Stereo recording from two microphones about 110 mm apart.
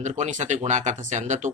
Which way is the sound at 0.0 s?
90° right.